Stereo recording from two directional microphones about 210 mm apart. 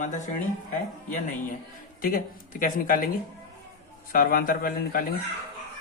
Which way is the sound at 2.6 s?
40° left (ahead or behind).